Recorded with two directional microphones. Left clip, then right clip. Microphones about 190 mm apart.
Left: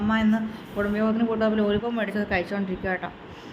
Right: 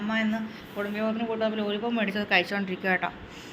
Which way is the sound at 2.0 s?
5° left (ahead or behind).